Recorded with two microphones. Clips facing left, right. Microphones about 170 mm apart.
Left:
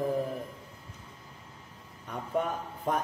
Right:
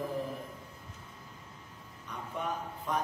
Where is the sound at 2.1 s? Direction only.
50° left (ahead or behind).